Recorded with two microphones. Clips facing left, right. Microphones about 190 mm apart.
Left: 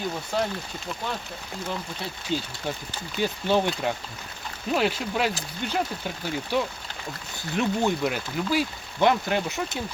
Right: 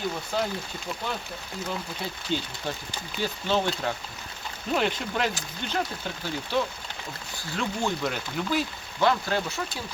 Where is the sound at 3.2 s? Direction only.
15° left (ahead or behind).